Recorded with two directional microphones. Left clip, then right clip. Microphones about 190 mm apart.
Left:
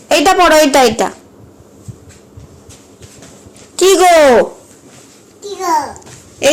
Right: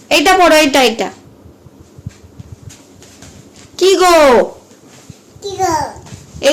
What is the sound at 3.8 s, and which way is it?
Speech, centre (ahead or behind).